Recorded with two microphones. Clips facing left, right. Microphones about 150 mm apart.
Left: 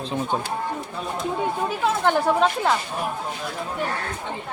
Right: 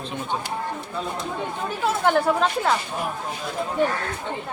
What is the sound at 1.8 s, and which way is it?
Speech, 5° right (ahead or behind).